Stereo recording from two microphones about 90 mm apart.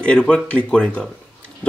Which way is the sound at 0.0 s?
10° left (ahead or behind).